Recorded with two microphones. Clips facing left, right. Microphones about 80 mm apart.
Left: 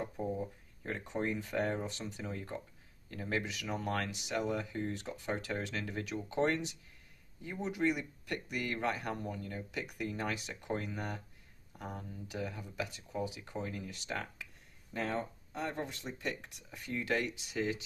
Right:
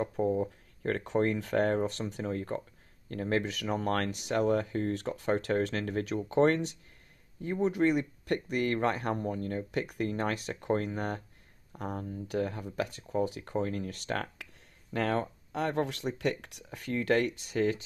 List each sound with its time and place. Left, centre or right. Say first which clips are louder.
0.0 s speech: right 8 dB; right